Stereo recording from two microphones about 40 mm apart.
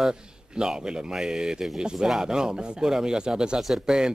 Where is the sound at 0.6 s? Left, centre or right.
Centre.